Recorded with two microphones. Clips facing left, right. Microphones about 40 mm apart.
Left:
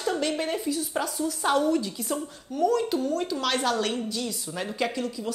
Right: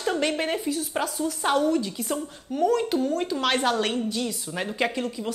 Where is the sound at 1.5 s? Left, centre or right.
Centre.